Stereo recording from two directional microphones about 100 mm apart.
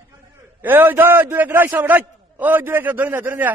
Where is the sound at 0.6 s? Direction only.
20° right (ahead or behind).